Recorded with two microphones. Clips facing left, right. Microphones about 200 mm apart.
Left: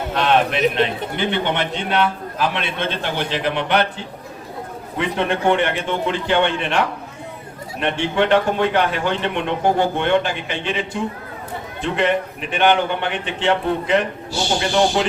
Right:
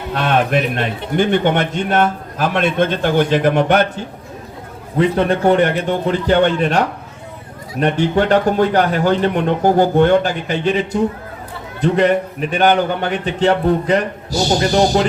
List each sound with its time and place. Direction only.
0.1 s a man's voice: 45° right (ahead or behind)